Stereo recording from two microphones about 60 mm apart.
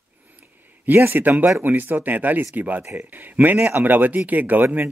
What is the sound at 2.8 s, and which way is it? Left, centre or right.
Speech, right.